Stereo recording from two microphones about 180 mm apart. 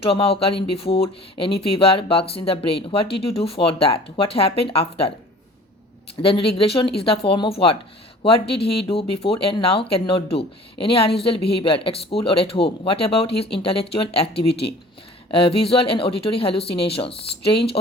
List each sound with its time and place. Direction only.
0.0 s speech: 30° left (ahead or behind)
6.2 s speech: 30° left (ahead or behind)
14.3 s speech: 65° left (ahead or behind)
15.4 s speech: 30° left (ahead or behind)